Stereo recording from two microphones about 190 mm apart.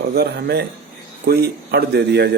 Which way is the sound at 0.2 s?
55° right (ahead or behind).